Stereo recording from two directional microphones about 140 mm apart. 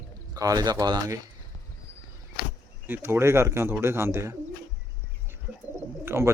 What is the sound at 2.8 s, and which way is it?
Speech, 15° right (ahead or behind).